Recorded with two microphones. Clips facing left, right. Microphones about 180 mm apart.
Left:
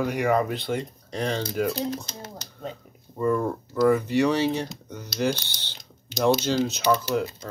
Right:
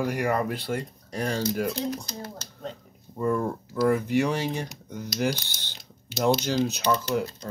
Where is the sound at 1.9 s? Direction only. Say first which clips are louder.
Even; 25° left (ahead or behind).